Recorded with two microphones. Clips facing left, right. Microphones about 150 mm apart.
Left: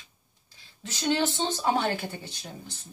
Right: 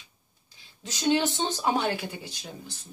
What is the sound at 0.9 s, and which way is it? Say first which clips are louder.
Speech: right 2 dB; 15° right (ahead or behind).